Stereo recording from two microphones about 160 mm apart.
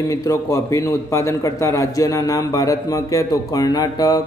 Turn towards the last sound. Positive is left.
turn(degrees=25)  # may be behind; listen again after turning